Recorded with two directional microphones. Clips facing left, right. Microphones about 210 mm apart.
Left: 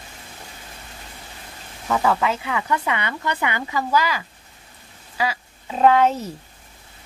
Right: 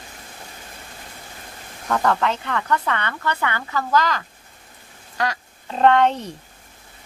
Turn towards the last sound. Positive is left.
turn(degrees=5)  # may be behind; listen again after turning